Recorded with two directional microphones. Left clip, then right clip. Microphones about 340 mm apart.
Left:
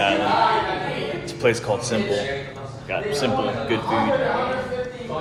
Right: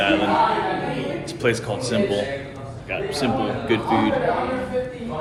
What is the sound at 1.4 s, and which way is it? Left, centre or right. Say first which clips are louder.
Speech: left 2 dB; centre.